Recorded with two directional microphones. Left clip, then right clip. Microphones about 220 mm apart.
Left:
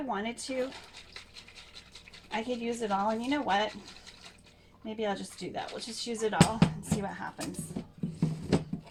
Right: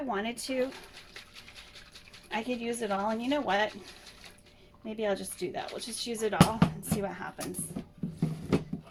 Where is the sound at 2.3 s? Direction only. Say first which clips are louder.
Even; 35° right (ahead or behind).